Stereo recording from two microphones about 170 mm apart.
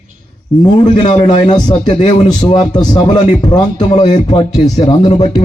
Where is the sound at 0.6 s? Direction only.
30° left (ahead or behind).